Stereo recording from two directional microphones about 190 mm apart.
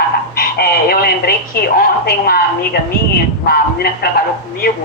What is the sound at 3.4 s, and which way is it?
Speech, 50° left (ahead or behind).